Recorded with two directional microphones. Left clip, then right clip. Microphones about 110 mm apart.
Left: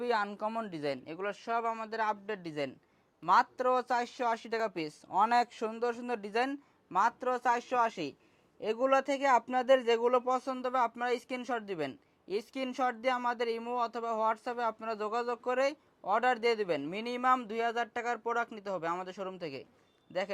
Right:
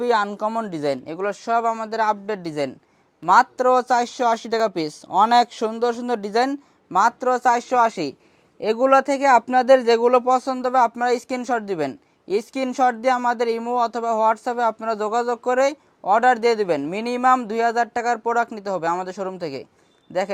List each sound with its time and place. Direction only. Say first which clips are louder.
0.0 s speech: right 12 dB; 40° right (ahead or behind)